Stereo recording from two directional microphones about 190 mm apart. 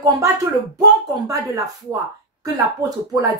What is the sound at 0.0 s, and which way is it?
Speech, 20° right (ahead or behind).